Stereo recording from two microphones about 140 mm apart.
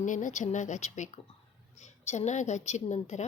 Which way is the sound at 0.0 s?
65° left (ahead or behind).